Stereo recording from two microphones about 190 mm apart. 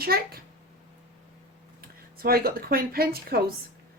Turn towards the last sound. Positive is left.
turn(degrees=-50)  # may be behind; listen again after turning